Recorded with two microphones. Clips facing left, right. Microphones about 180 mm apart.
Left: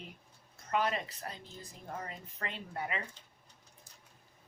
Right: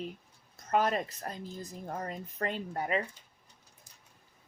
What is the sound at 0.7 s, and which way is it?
A woman's voice, 45° right (ahead or behind).